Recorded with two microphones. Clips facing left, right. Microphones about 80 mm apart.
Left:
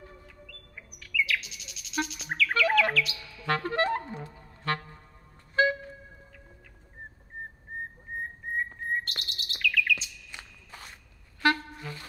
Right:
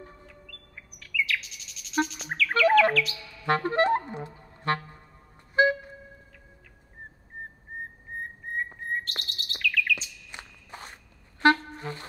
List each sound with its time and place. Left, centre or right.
0.5 s chirp: centre
2.9 s music: centre
3.4 s music: right
8.9 s chirp: centre
10.3 s walk: right
11.4 s brass instrument: right